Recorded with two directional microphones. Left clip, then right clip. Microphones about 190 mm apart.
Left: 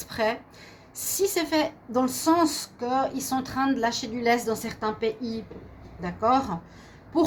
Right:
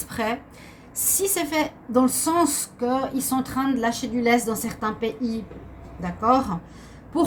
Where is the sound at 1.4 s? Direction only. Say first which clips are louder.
Right 1 dB; 35° left (ahead or behind).